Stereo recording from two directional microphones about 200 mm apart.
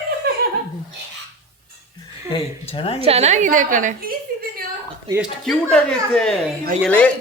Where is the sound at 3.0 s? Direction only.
30° right (ahead or behind).